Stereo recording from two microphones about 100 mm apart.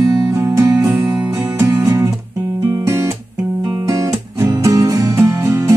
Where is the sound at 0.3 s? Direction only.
25° right (ahead or behind).